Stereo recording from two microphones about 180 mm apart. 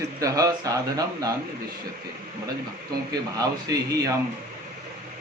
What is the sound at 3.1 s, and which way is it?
A man's voice, 20° right (ahead or behind).